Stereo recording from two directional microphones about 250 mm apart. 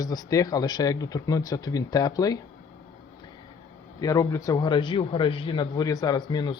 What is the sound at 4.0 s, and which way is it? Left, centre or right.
A man's voice, centre.